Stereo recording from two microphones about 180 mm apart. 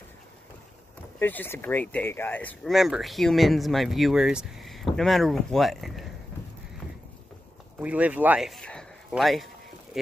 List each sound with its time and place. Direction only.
1.2 s speech: 10° left (ahead or behind)
7.8 s speech: 10° right (ahead or behind)